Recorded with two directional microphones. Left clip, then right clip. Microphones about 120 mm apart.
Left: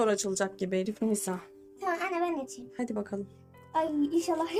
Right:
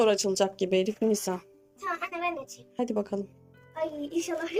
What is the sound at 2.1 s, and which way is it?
Music, 55° left (ahead or behind).